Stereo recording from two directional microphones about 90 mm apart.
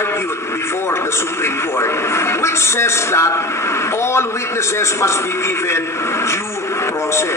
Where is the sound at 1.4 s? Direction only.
30° left (ahead or behind).